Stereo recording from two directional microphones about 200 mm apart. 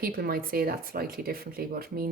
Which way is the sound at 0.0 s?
45° right (ahead or behind).